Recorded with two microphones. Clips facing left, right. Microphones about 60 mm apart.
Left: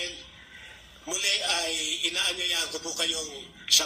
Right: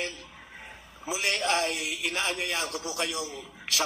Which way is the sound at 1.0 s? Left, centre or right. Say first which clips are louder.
Right 3 dB; right.